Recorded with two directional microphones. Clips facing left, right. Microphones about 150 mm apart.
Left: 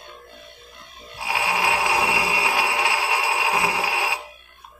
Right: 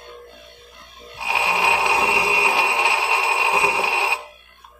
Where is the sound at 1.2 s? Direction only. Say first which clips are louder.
Right 2 dB; 20° right (ahead or behind).